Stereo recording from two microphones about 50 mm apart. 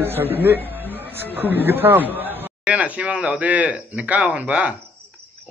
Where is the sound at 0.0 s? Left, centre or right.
Right.